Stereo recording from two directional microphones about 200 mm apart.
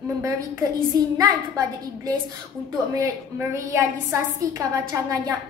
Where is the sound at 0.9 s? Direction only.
20° right (ahead or behind).